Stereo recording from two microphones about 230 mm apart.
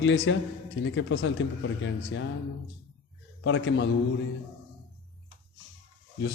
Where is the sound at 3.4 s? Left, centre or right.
Left.